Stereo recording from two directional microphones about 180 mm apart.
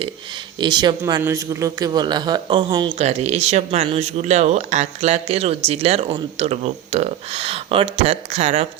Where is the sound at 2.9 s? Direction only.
35° right (ahead or behind).